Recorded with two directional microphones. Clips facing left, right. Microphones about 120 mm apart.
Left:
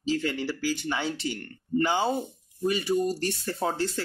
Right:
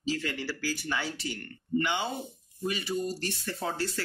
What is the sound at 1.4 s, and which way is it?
Speech, 35° left (ahead or behind).